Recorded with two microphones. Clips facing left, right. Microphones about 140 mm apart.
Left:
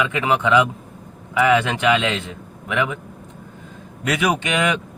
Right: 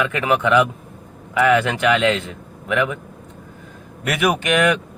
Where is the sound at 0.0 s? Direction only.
20° left (ahead or behind).